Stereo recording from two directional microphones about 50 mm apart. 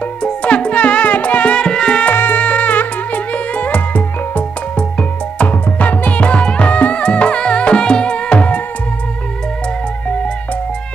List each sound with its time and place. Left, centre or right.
0.2 s music: left
2.1 s music: left
2.4 s music: left